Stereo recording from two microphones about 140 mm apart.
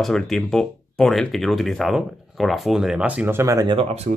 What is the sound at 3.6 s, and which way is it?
Speech, 40° right (ahead or behind).